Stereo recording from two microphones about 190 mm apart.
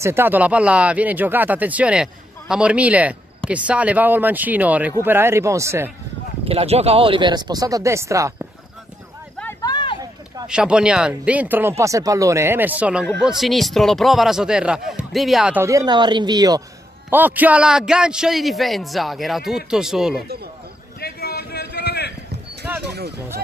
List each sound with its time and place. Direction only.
0.0 s speech: 10° right (ahead or behind)
6.4 s speech: 30° right (ahead or behind); by 8.3 s 15° right (ahead or behind)
9.6 s a sound: 25° left (ahead or behind)
10.4 s speech: 5° right (ahead or behind); by 16.6 s 20° right (ahead or behind)
17.1 s speech: 10° right (ahead or behind)
21.0 s a sound: 55° left (ahead or behind)
22.9 s speech: 60° right (ahead or behind)